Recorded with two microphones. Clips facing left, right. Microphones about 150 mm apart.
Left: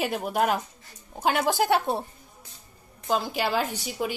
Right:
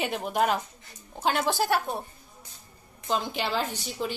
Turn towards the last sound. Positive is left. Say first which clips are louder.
# left 2 dB
turn(degrees=10)  # may be behind; listen again after turning